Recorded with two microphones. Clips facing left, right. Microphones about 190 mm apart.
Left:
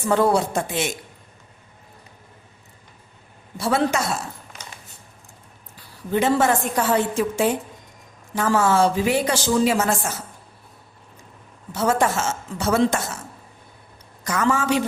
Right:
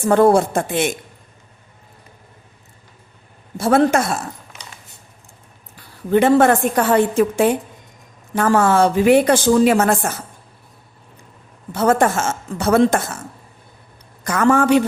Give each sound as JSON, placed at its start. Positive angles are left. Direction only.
{"t": 0.0, "sound": "a woman's voice", "side_deg": -55}
{"t": 3.6, "sound": "a woman's voice", "side_deg": -50}
{"t": 5.7, "sound": "a woman's voice", "side_deg": -60}
{"t": 11.7, "sound": "a woman's voice", "side_deg": -55}
{"t": 14.3, "sound": "a woman's voice", "side_deg": -55}